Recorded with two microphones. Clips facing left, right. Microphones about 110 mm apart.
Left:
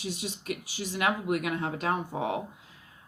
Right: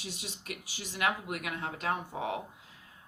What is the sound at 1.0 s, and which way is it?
A woman's voice, 25° left (ahead or behind).